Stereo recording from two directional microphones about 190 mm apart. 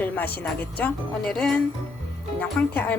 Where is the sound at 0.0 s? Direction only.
10° left (ahead or behind).